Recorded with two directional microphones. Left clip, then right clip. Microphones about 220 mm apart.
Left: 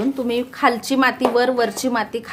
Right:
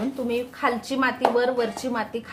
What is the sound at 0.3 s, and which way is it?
A woman's voice, 50° left (ahead or behind).